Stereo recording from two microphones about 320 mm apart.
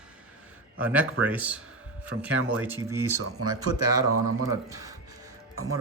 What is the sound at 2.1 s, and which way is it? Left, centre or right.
Speech, right.